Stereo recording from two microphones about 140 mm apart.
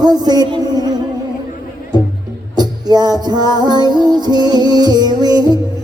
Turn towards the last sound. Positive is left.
turn(degrees=-30)  # may be behind; listen again after turning